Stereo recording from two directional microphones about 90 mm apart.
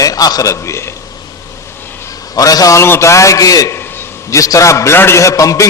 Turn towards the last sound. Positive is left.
turn(degrees=40)  # may be behind; listen again after turning